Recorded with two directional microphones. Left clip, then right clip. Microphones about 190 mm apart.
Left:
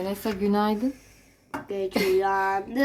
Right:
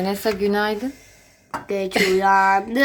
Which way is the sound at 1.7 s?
30° right (ahead or behind).